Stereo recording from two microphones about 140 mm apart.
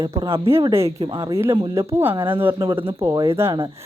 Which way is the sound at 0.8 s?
40° right (ahead or behind).